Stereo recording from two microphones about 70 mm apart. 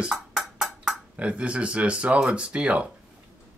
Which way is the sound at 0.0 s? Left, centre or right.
Centre.